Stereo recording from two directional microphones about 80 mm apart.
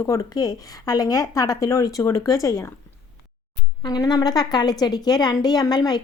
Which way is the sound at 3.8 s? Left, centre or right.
Left.